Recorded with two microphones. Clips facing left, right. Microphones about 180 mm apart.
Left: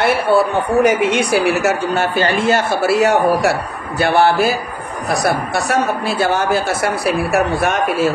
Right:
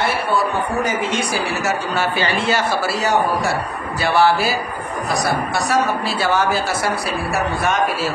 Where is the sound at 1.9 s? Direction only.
45° left (ahead or behind).